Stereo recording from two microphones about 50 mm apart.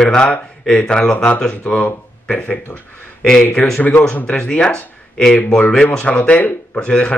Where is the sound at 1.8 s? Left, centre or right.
Left.